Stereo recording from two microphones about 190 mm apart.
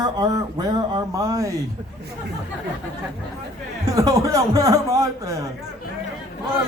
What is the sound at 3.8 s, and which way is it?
A man's voice, 20° right (ahead or behind).